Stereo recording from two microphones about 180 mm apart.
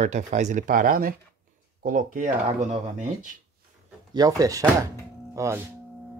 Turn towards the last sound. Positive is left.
turn(degrees=-15)  # may be behind; listen again after turning